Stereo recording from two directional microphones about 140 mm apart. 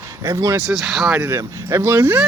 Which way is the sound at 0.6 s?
Centre (ahead or behind).